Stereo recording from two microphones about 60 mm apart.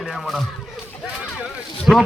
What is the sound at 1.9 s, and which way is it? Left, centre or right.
Speech, right.